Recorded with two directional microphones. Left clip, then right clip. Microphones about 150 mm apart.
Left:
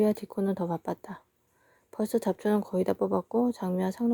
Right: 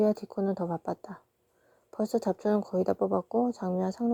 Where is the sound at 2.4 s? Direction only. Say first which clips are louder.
Even; 35° left (ahead or behind).